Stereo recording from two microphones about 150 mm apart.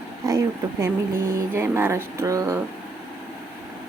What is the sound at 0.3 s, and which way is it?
Speech, 20° right (ahead or behind).